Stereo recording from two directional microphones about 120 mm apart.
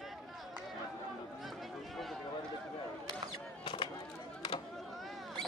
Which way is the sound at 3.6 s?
45° left (ahead or behind).